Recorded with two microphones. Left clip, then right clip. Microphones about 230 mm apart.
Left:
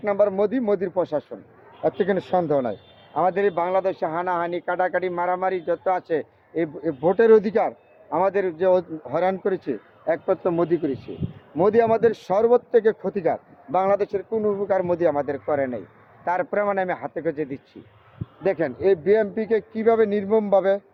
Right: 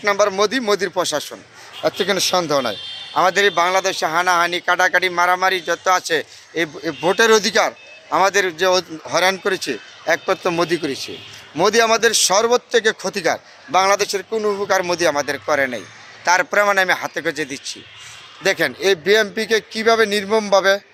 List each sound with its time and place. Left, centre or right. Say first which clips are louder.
0.0 s a man's voice: right 4 dB; centre
14.4 s speech: right 4 dB; right
15.4 s a man's voice: right 5 dB; centre
20.2 s speech: right 3 dB; centre
20.5 s a man's voice: right 6 dB; centre